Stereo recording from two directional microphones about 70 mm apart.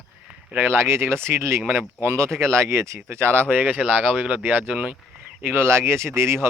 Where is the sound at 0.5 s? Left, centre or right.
Right.